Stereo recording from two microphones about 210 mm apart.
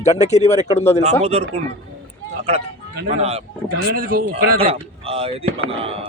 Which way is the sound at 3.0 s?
35° right (ahead or behind).